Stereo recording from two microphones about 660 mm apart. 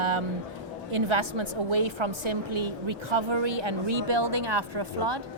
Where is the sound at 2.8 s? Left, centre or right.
Right.